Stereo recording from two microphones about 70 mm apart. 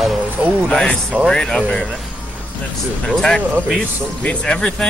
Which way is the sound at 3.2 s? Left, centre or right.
Centre.